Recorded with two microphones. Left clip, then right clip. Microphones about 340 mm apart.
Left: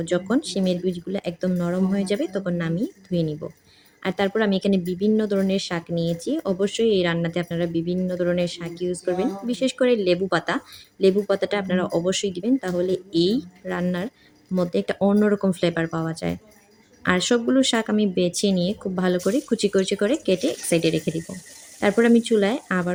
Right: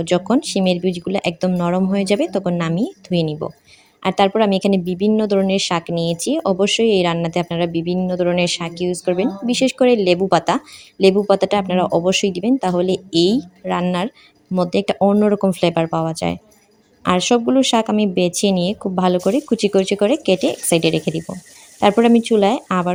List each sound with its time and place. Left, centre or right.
0.0 s speech: centre
20.5 s speech: centre
22.0 s speech: centre